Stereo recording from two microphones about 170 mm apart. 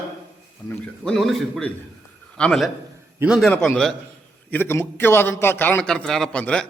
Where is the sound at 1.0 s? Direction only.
Centre (ahead or behind).